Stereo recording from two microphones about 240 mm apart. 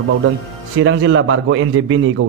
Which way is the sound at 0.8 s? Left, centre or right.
Right.